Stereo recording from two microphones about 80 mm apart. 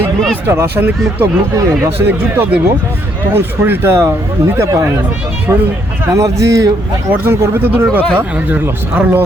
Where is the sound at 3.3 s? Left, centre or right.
Right.